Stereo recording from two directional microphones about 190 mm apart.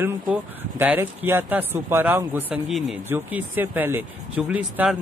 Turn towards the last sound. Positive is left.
turn(degrees=-5)  # may be behind; listen again after turning